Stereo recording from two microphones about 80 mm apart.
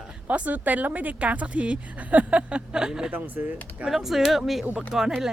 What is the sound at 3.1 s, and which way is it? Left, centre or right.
Speech, right.